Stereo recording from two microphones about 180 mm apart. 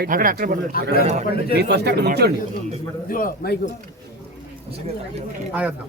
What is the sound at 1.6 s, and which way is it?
Speech, 70° right (ahead or behind).